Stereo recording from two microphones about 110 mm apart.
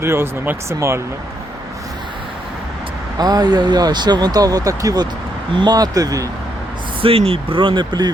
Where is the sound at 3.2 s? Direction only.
35° right (ahead or behind).